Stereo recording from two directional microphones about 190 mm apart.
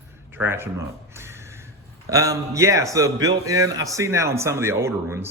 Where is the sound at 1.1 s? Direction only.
15° right (ahead or behind).